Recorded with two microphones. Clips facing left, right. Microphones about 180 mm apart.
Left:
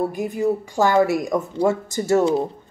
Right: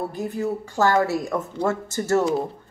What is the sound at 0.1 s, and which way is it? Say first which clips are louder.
Speech: left 4 dB; 15° left (ahead or behind).